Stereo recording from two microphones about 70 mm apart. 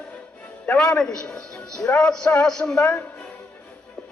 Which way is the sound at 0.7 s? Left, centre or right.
Centre.